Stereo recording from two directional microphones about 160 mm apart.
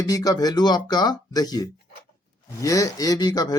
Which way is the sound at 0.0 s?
20° left (ahead or behind).